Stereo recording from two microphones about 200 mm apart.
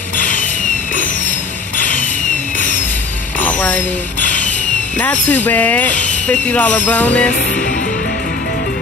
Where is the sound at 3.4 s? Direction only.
10° left (ahead or behind).